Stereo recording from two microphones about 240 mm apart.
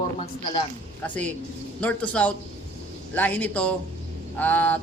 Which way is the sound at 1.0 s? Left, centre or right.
Centre.